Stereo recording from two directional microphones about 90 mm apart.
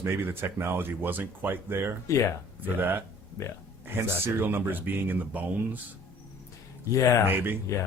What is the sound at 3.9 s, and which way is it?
Speech, 25° right (ahead or behind).